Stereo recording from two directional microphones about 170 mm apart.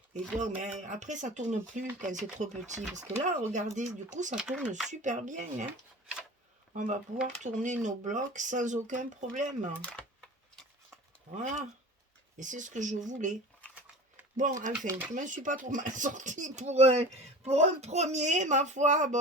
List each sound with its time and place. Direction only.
0.1 s speech: 45° right (ahead or behind)
4.4 s speech: 5° right (ahead or behind)
4.9 s speech: 45° right (ahead or behind)
6.7 s speech: 45° right (ahead or behind)
9.8 s typing: 5° left (ahead or behind)
11.3 s speech: 45° right (ahead or behind)
14.8 s speech: 10° right (ahead or behind)
15.1 s speech: 45° right (ahead or behind)